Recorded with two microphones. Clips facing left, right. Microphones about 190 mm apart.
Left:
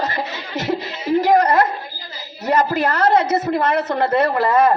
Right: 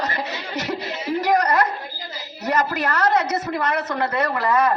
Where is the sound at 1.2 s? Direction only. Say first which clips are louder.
Left 4 dB; 25° left (ahead or behind).